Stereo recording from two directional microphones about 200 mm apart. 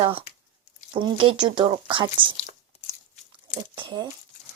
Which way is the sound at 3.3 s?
25° right (ahead or behind).